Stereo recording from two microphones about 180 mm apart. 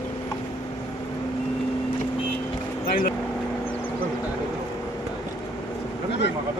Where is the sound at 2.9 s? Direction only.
50° left (ahead or behind).